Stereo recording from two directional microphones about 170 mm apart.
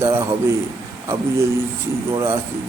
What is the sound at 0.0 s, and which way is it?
Speech, 15° right (ahead or behind).